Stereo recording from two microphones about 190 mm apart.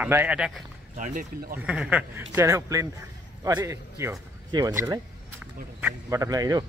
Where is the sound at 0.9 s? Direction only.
45° right (ahead or behind).